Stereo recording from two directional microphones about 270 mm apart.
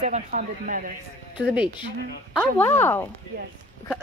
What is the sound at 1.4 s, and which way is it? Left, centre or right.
Speech, centre.